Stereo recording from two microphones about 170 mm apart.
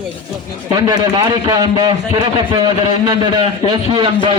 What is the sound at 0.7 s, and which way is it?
A man's voice, 25° right (ahead or behind).